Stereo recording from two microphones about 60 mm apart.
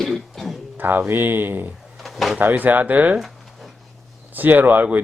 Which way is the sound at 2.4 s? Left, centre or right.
Right.